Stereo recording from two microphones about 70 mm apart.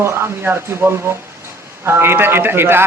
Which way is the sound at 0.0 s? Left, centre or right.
Right.